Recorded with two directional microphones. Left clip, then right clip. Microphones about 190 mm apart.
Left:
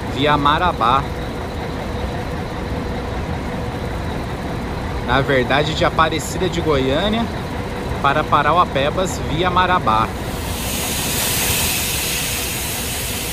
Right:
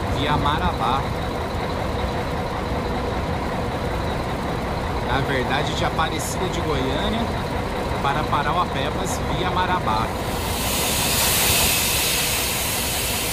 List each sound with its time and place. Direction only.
0.3 s speech: 10° right (ahead or behind)
5.1 s speech: 10° right (ahead or behind)
11.1 s vehicle: 55° right (ahead or behind)